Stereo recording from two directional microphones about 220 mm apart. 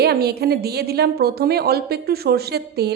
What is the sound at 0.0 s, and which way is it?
A woman's voice, 45° right (ahead or behind).